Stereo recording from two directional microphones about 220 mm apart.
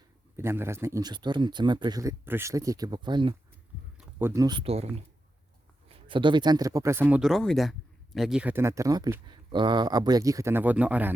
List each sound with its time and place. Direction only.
0.3 s speech: 10° right (ahead or behind)
3.9 s speech: 10° right (ahead or behind); by 4.9 s 25° right (ahead or behind)
5.9 s speech: 20° right (ahead or behind); by 11.1 s 5° right (ahead or behind)